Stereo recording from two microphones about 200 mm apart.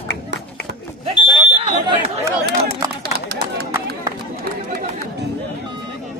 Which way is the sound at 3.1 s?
55° right (ahead or behind).